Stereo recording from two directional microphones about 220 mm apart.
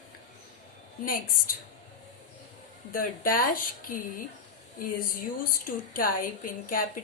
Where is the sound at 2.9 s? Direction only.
40° left (ahead or behind).